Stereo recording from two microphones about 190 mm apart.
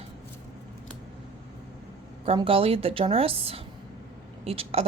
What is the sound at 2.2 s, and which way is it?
A woman's voice, 30° right (ahead or behind).